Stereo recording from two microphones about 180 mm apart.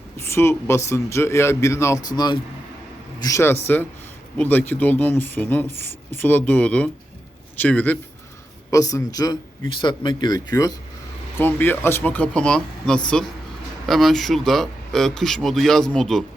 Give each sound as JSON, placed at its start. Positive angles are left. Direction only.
{"t": 0.2, "sound": "a man's voice", "side_deg": 15}